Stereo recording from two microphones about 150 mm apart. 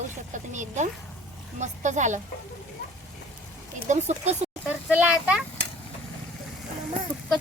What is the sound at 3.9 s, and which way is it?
Speech, 50° right (ahead or behind).